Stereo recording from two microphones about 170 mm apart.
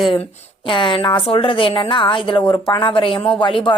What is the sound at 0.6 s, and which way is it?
A woman's voice, 30° left (ahead or behind).